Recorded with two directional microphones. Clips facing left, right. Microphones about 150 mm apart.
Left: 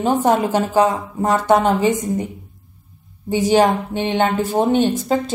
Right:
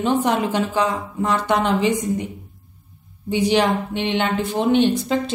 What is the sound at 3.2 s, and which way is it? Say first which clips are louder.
A woman's voice: left 3 dB; 45° left (ahead or behind).